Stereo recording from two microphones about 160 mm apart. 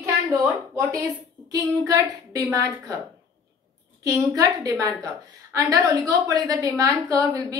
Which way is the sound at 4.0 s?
20° right (ahead or behind).